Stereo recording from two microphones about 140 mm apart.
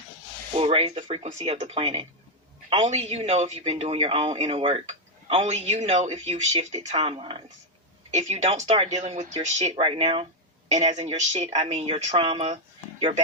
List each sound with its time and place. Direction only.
0.5 s speech: 45° right (ahead or behind)
1.1 s a man's voice: 55° right (ahead or behind)
8.1 s a man's voice: 50° right (ahead or behind)
9.7 s speech: 40° right (ahead or behind)
10.7 s a man's voice: 50° right (ahead or behind)